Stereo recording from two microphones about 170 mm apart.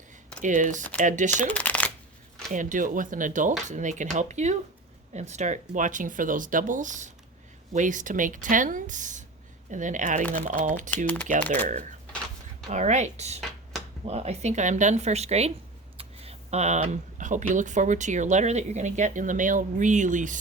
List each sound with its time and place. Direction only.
0.4 s speech: 50° right (ahead or behind)
1.5 s shuffling cards: 10° left (ahead or behind)
2.5 s speech: 50° right (ahead or behind)
10.9 s speech: 10° left (ahead or behind)
12.7 s speech: 45° right (ahead or behind)